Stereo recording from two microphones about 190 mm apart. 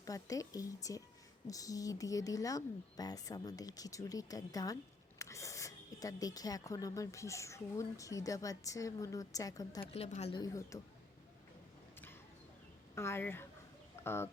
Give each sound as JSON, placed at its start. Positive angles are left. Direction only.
{"t": 0.0, "sound": "a woman's voice", "side_deg": 20}
{"t": 9.8, "sound": "speech", "side_deg": 35}
{"t": 10.3, "sound": "speech", "side_deg": 20}
{"t": 13.0, "sound": "a woman's voice", "side_deg": 10}
{"t": 14.0, "sound": "fowl", "side_deg": 10}